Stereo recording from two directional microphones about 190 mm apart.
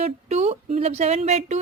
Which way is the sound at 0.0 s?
35° right (ahead or behind).